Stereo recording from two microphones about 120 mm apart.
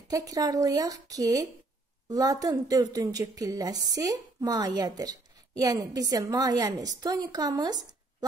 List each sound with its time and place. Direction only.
0.1 s a woman's voice: 30° right (ahead or behind)